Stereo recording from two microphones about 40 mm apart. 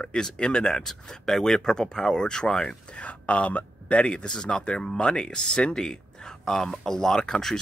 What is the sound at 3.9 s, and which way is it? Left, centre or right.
Speech, left.